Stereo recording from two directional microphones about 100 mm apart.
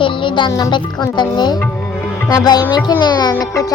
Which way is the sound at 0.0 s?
55° left (ahead or behind).